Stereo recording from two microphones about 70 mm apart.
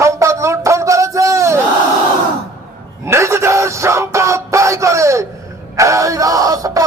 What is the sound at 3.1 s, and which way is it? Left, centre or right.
Speech, right.